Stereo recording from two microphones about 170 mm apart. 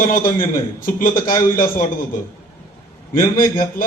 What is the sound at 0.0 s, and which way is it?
A man's voice, 55° left (ahead or behind).